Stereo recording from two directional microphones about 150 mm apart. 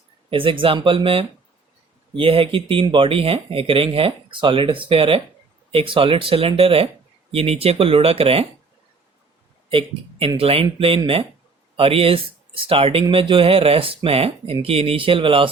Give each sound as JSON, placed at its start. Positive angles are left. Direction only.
{"t": 0.3, "sound": "speech", "side_deg": -35}
{"t": 9.6, "sound": "speech", "side_deg": -40}